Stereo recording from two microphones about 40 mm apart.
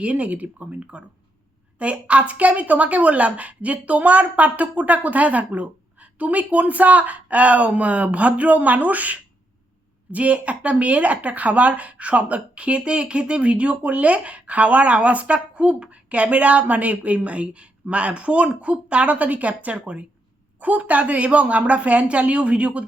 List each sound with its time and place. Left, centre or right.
0.0 s speech: right
20.6 s speech: right